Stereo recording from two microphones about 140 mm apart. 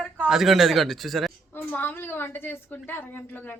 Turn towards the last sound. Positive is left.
turn(degrees=15)  # may be behind; listen again after turning